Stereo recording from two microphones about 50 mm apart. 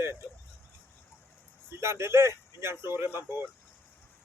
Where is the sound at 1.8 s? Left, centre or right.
Right.